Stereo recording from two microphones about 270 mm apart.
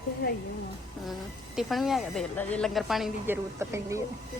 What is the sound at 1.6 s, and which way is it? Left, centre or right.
Speech, centre.